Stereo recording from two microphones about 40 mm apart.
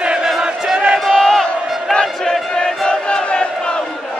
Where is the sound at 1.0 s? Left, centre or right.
Centre.